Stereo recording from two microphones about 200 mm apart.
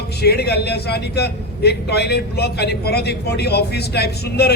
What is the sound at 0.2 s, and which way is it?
A man's voice, 55° left (ahead or behind).